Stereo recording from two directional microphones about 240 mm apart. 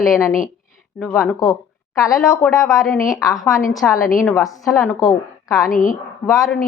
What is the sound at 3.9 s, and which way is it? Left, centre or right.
Speech, left.